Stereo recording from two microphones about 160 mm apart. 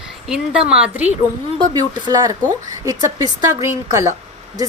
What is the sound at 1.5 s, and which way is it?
A woman's voice, 25° right (ahead or behind).